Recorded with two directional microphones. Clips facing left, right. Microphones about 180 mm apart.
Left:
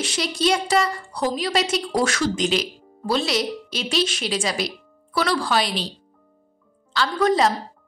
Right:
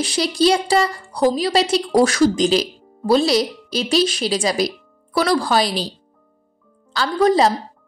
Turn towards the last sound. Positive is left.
turn(degrees=-35)  # may be behind; listen again after turning